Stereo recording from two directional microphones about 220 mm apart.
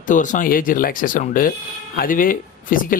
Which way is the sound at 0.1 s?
35° left (ahead or behind).